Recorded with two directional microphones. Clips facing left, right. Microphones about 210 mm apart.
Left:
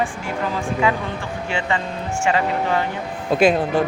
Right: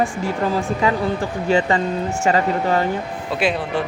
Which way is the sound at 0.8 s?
35° right (ahead or behind).